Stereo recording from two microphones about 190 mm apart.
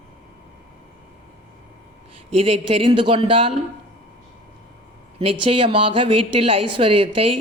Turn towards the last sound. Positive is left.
turn(degrees=-30)  # may be behind; listen again after turning